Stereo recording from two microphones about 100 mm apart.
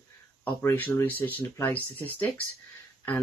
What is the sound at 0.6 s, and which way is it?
Speech, 30° left (ahead or behind).